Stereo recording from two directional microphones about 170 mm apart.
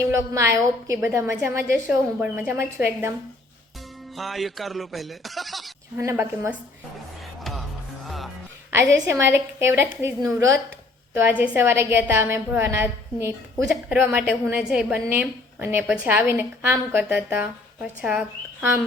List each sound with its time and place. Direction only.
0.0 s a woman's voice: 15° right (ahead or behind)
4.2 s speech: centre (ahead or behind)
6.0 s a woman's voice: 15° right (ahead or behind)
8.0 s music: centre (ahead or behind)
9.0 s a woman's voice: 15° right (ahead or behind)